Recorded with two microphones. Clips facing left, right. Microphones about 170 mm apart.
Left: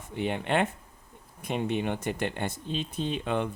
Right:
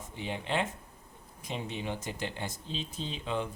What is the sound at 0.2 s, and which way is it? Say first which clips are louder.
Speech: left 6 dB; 60° left (ahead or behind).